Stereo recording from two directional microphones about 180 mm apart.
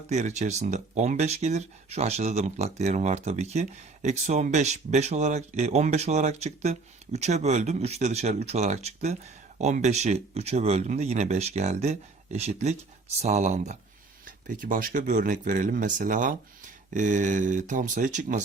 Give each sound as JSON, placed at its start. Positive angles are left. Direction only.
{"t": 0.1, "sound": "speech", "side_deg": -40}